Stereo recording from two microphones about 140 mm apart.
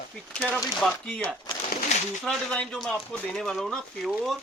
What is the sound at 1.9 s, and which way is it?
Bird, 55° left (ahead or behind).